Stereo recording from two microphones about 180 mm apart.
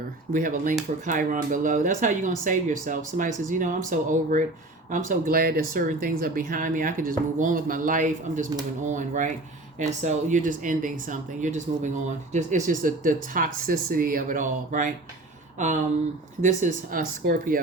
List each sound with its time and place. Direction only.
0.3 s speech: 50° right (ahead or behind)